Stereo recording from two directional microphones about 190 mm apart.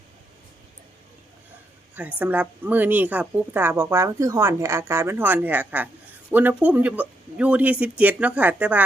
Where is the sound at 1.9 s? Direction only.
10° right (ahead or behind).